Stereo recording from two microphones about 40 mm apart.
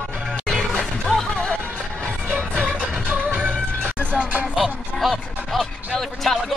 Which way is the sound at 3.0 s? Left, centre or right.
Right.